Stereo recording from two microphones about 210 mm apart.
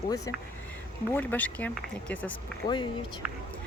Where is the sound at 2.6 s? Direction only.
20° left (ahead or behind).